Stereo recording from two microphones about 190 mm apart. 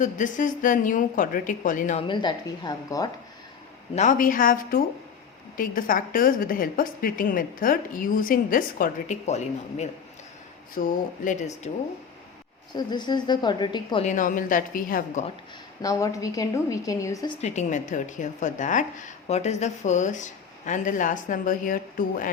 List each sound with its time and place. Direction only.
0.0 s a woman's voice: 40° left (ahead or behind)
2.0 s a woman's voice: 25° left (ahead or behind)
3.9 s a woman's voice: 40° left (ahead or behind)
12.7 s a woman's voice: 25° left (ahead or behind)
14.0 s a woman's voice: 40° left (ahead or behind)
15.8 s a woman's voice: 20° left (ahead or behind)
17.4 s a woman's voice: 40° left (ahead or behind)